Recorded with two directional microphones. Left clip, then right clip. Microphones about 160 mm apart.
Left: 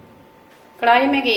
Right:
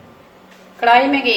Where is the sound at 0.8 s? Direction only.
25° left (ahead or behind).